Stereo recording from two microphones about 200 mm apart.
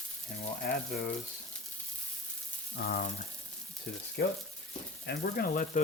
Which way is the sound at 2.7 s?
50° left (ahead or behind).